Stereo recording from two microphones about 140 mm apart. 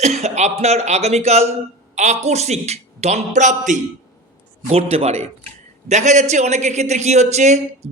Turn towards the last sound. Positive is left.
turn(degrees=-55)  # may be behind; listen again after turning